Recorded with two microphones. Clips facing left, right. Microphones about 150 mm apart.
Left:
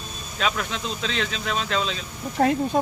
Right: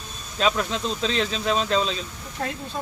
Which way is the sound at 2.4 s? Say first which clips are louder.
Left 10 dB; 55° left (ahead or behind).